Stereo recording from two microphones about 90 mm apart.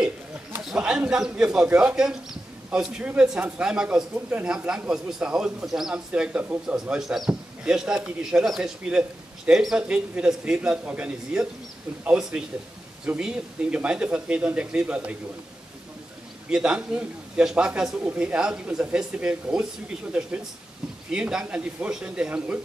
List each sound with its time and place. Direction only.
0.6 s speech: 5° right (ahead or behind)
16.4 s speech: 10° right (ahead or behind)